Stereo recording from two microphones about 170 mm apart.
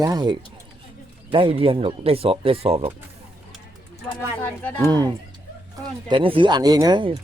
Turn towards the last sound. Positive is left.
turn(degrees=-25)  # may be behind; listen again after turning